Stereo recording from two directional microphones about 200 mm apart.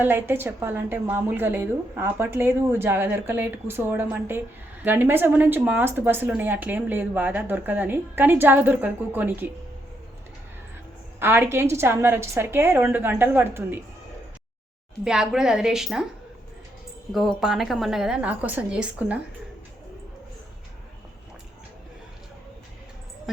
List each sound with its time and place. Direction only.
0.0 s a woman's voice: 10° right (ahead or behind)
11.2 s a woman's voice: 10° right (ahead or behind)
15.0 s a woman's voice: 5° right (ahead or behind)
17.1 s a woman's voice: centre (ahead or behind)